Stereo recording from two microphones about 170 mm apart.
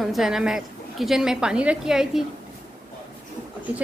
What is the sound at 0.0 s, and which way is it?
A woman's voice, centre (ahead or behind).